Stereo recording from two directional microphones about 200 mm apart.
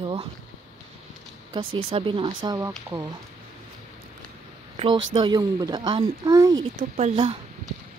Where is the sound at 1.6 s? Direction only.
90° right.